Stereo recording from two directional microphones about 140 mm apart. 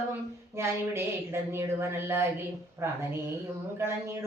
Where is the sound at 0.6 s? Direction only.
20° right (ahead or behind).